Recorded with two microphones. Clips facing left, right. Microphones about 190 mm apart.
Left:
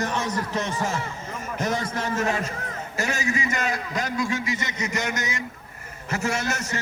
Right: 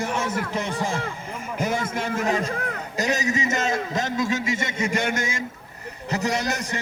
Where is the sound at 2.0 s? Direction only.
15° right (ahead or behind).